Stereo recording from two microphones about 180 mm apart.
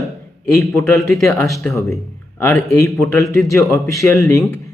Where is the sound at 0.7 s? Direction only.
Centre (ahead or behind).